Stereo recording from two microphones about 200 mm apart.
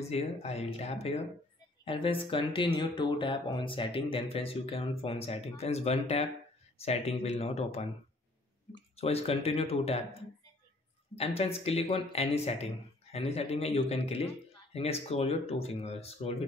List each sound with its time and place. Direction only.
0.0 s a man's voice: 30° left (ahead or behind)